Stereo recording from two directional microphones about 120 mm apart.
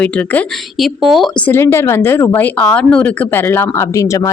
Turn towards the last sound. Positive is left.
turn(degrees=25)  # may be behind; listen again after turning